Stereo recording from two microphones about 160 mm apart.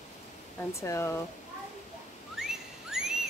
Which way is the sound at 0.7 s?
20° left (ahead or behind).